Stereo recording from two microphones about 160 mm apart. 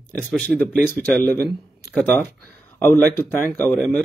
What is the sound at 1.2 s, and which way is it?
Speech, 75° right (ahead or behind).